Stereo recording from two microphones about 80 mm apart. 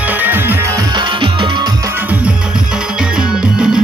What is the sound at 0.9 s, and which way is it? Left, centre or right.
Music, right.